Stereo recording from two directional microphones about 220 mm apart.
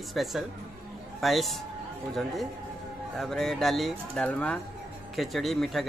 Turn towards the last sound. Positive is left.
turn(degrees=0)  # may be behind; listen again after turning